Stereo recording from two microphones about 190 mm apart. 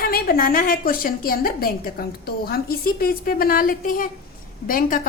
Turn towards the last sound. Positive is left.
turn(degrees=45)  # may be behind; listen again after turning